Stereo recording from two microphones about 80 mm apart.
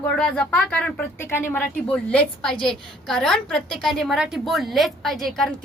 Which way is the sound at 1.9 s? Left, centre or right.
Centre.